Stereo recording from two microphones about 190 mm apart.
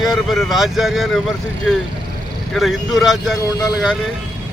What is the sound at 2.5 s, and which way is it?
Speech, centre (ahead or behind).